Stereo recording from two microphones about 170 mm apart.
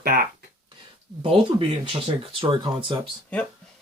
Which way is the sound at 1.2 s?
35° right (ahead or behind).